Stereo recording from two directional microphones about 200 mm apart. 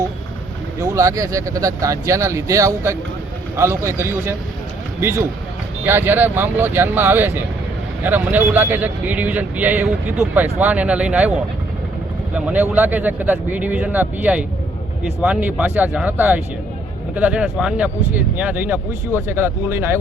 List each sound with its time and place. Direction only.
0.8 s speech: 15° right (ahead or behind)
12.3 s speech: 10° right (ahead or behind)